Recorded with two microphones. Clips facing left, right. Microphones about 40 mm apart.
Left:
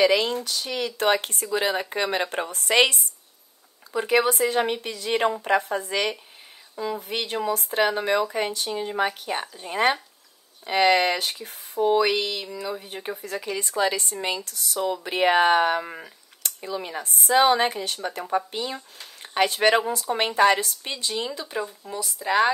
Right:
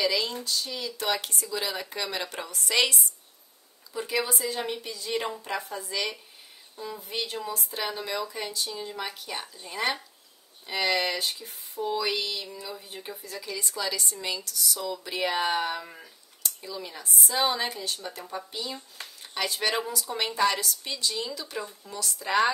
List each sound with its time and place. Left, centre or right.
0.0 s speech: left
3.9 s speech: left
6.8 s speech: left
12.4 s speech: left
22.0 s speech: centre